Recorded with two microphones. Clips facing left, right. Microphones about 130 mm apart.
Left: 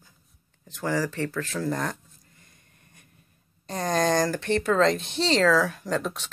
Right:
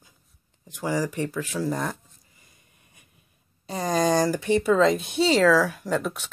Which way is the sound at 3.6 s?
5° right (ahead or behind).